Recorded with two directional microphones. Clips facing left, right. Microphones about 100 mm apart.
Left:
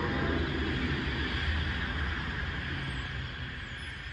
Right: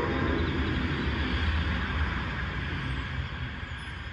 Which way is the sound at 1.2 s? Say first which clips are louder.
Right 4 dB; 50° right (ahead or behind).